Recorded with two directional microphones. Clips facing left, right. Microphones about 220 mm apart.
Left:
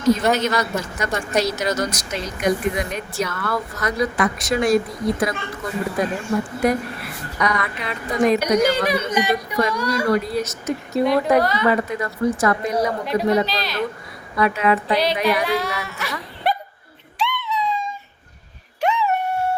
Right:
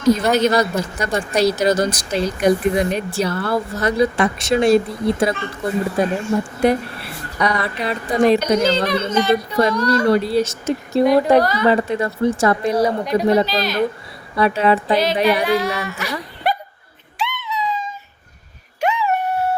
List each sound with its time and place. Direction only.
0.3 s speech: 35° right (ahead or behind)
8.4 s speech: 15° left (ahead or behind)
10.1 s a woman's voice: 30° right (ahead or behind)
11.3 s speech: centre (ahead or behind)
11.6 s a woman's voice: 30° right (ahead or behind)
13.5 s speech: centre (ahead or behind)
14.3 s speech: 30° right (ahead or behind)
14.9 s speech: centre (ahead or behind)
17.2 s a sound: 5° right (ahead or behind)
18.8 s dog: 5° right (ahead or behind)